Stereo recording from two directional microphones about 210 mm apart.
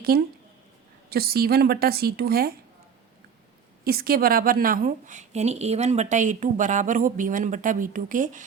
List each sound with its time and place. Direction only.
0.1 s a woman's voice: 45° right (ahead or behind)
3.8 s a woman's voice: 45° right (ahead or behind)